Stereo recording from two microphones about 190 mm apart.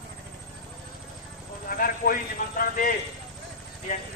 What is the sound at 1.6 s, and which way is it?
A man's voice, 50° left (ahead or behind).